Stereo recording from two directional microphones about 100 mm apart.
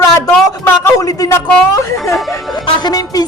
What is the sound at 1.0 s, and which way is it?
Speech, 35° left (ahead or behind).